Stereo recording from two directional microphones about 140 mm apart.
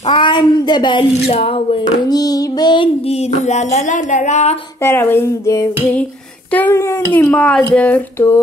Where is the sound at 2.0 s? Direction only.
25° left (ahead or behind); by 4.5 s 55° left (ahead or behind).